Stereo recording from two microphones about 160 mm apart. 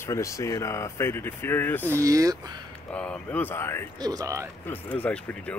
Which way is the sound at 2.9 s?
5° left (ahead or behind).